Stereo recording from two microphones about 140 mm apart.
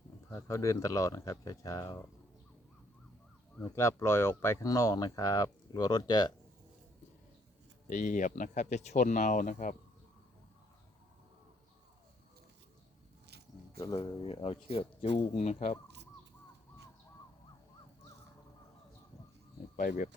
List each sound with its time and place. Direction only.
0.3 s speech: 25° left (ahead or behind)
3.6 s speech: 20° left (ahead or behind)
7.9 s speech: 65° left (ahead or behind)
13.7 s speech: 40° left (ahead or behind)
19.7 s speech: 80° left